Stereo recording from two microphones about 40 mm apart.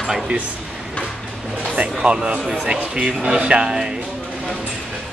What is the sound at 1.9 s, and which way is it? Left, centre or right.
Speech, right.